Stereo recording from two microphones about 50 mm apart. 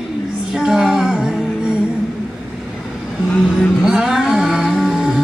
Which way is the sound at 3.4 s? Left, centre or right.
Centre.